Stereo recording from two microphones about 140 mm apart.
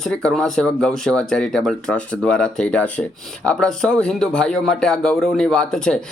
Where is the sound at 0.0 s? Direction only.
5° left (ahead or behind).